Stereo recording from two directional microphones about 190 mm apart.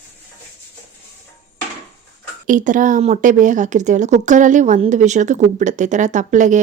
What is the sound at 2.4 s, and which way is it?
A woman's voice, 45° right (ahead or behind).